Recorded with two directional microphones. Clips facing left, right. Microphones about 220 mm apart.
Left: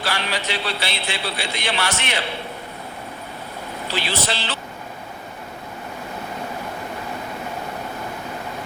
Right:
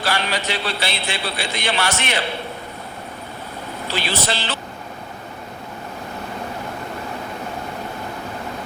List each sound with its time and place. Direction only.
0.0 s a man's voice: 45° right (ahead or behind)
4.0 s a man's voice: 45° right (ahead or behind)